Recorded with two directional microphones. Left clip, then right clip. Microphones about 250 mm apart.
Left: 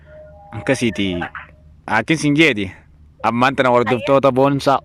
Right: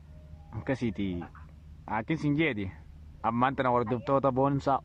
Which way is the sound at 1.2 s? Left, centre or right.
Left.